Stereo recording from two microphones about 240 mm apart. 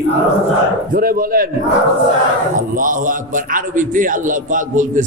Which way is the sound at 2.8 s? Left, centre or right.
Right.